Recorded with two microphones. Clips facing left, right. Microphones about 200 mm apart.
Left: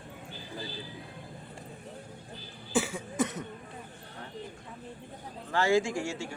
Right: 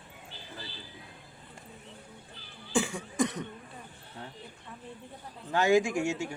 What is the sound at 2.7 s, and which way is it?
Cough, 5° left (ahead or behind).